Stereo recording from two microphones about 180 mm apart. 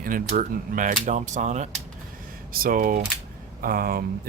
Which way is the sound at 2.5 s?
50° right (ahead or behind).